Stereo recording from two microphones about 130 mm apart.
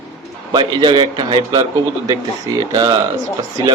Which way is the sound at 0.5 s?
35° right (ahead or behind).